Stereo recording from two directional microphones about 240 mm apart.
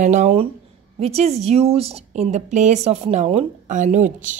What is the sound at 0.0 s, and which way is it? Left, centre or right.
A woman's voice, right.